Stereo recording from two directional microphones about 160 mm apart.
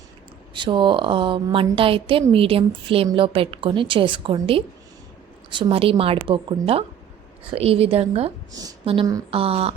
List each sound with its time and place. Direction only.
0.5 s a woman's voice: 30° right (ahead or behind)